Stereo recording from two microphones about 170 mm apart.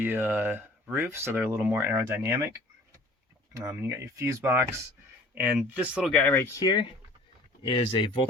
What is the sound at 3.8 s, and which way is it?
Speech, 15° right (ahead or behind).